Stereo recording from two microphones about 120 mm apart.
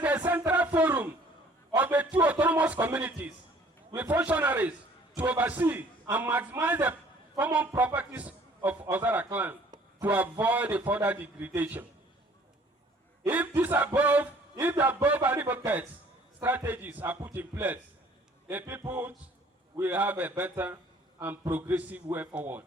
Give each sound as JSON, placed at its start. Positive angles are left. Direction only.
{"t": 0.0, "sound": "music", "side_deg": -15}
{"t": 1.7, "sound": "a sound", "side_deg": -10}
{"t": 3.9, "sound": "a man's voice", "side_deg": -15}
{"t": 13.2, "sound": "a man's voice", "side_deg": -15}